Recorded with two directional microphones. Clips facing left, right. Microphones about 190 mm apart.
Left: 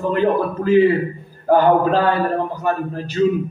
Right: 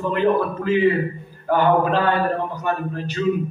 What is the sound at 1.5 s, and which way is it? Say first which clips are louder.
A man's voice: left 4 dB; 35° left (ahead or behind).